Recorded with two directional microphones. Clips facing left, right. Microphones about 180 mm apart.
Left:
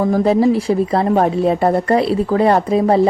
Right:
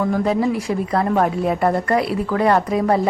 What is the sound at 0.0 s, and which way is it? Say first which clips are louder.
Speech: left 5 dB; 30° left (ahead or behind).